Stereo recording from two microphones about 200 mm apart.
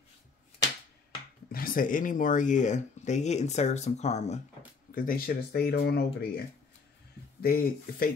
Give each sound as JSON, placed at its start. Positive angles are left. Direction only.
{"t": 1.5, "sound": "speech", "side_deg": 45}
{"t": 4.9, "sound": "speech", "side_deg": 45}
{"t": 7.4, "sound": "speech", "side_deg": 50}